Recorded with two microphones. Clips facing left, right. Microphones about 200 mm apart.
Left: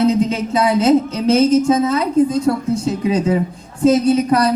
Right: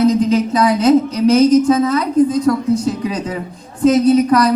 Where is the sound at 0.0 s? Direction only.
25° left (ahead or behind).